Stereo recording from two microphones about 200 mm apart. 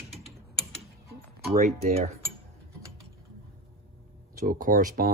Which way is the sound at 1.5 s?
45° right (ahead or behind).